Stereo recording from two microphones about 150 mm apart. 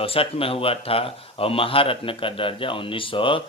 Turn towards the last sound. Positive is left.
turn(degrees=35)  # may be behind; listen again after turning